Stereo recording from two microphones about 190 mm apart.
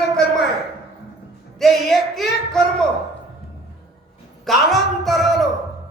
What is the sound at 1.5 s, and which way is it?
A man's voice, centre (ahead or behind).